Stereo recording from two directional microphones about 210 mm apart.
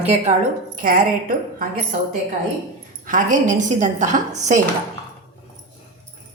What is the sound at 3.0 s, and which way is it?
A woman's voice, 40° right (ahead or behind).